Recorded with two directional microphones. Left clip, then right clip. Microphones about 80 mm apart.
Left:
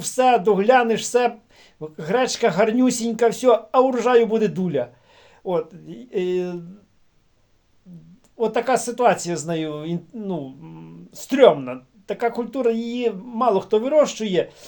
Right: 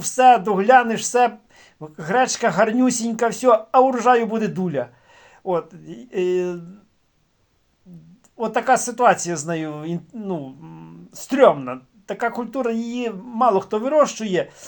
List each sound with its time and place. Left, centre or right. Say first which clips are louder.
0.0 s speech: right 3 dB; centre
8.4 s speech: right 2 dB; centre